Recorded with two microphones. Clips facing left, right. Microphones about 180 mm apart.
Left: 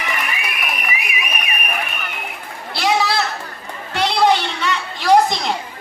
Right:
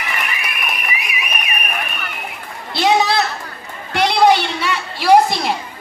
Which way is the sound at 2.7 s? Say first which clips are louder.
Right 3 dB; 20° right (ahead or behind).